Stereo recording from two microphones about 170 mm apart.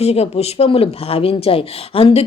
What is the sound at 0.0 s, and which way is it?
Speech, 40° left (ahead or behind).